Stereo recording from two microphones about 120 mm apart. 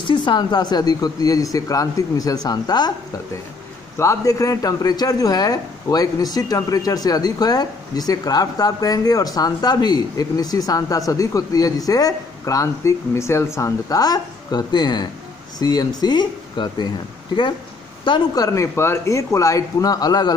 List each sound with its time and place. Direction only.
0.0 s speech: 40° left (ahead or behind)
4.0 s speech: 25° left (ahead or behind)
18.0 s speech: 35° left (ahead or behind)